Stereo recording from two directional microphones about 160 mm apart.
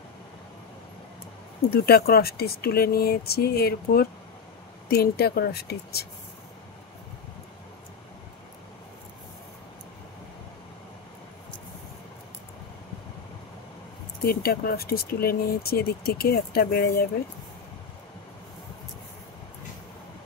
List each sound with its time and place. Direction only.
1.7 s speech: 75° left (ahead or behind)
14.2 s speech: 70° left (ahead or behind)